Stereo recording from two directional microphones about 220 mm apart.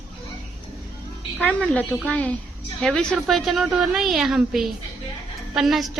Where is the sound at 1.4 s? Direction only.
5° left (ahead or behind).